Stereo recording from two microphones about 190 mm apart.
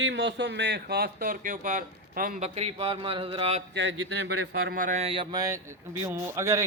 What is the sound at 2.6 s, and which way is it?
Speech, 30° right (ahead or behind).